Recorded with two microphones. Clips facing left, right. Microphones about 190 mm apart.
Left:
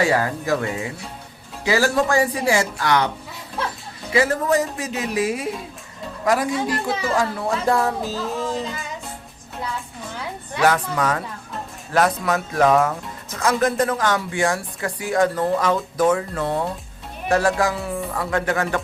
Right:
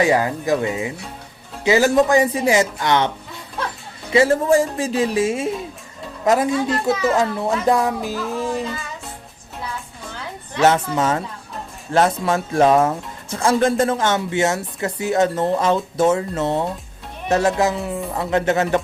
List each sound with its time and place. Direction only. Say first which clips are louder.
0.0 s speech: right 3 dB; 20° right (ahead or behind)
4.1 s speech: right 4 dB; 25° right (ahead or behind)
10.6 s speech: right 3 dB; 25° right (ahead or behind)